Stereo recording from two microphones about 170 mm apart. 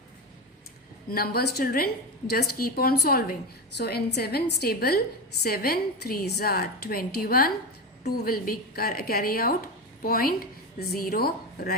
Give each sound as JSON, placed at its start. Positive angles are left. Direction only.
{"t": 1.1, "sound": "a woman's voice", "side_deg": 65}